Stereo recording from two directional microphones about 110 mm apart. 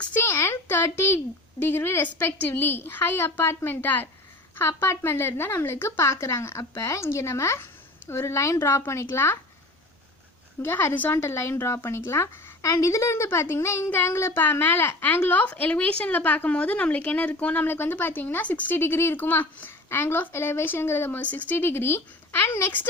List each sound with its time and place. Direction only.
0.0 s speech: 20° left (ahead or behind)
10.6 s speech: 20° left (ahead or behind)